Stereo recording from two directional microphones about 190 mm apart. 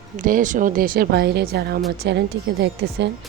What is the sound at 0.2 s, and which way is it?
A woman's voice, 45° right (ahead or behind).